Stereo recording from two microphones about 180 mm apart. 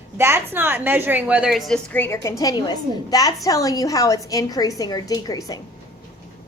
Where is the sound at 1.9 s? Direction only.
15° left (ahead or behind).